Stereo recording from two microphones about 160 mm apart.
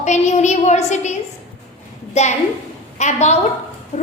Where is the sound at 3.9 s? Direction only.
45° left (ahead or behind).